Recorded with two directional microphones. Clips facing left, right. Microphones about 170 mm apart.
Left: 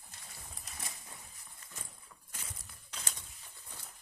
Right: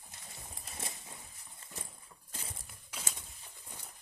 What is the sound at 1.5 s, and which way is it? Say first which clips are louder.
Clip-clop: right 4 dB; 30° right (ahead or behind).